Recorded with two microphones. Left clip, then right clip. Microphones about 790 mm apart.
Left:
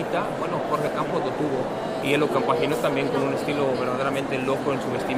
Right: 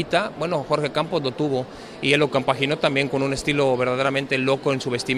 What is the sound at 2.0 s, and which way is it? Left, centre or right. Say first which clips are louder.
Speech: right 3 dB; right.